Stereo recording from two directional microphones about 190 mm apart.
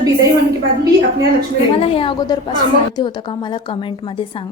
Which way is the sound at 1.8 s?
30° left (ahead or behind).